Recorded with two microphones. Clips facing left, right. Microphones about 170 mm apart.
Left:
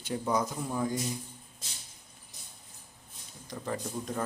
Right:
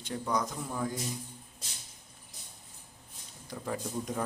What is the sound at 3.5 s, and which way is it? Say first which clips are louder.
Speech: left 1 dB; 5° right (ahead or behind).